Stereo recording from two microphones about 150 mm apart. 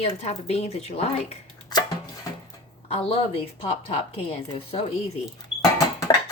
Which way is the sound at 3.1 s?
40° left (ahead or behind).